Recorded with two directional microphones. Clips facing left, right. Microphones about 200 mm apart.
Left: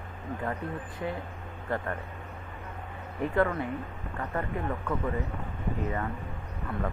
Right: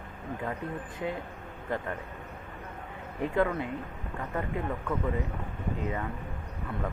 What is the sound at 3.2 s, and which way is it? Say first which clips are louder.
Speech: left 1 dB; 15° right (ahead or behind).